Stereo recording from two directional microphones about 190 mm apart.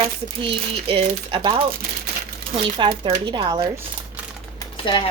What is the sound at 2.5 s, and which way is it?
Speech, 30° right (ahead or behind).